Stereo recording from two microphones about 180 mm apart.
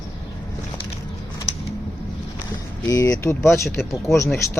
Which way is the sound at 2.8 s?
20° left (ahead or behind).